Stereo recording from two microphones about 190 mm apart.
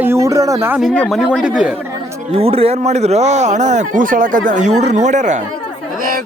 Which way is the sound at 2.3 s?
30° right (ahead or behind).